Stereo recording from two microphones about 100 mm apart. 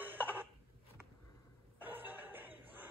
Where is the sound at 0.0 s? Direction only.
20° right (ahead or behind).